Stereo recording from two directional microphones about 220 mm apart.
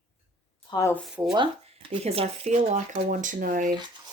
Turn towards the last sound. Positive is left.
turn(degrees=-35)  # may be behind; listen again after turning